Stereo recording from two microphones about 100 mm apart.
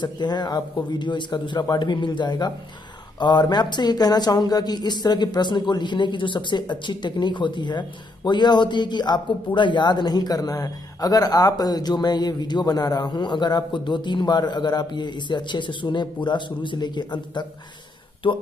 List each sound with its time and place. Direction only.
0.0 s speech: 45° left (ahead or behind)